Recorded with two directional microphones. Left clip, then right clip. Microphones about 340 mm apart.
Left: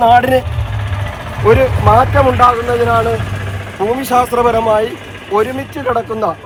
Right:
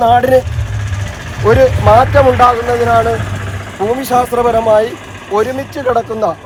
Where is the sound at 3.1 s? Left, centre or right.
Right.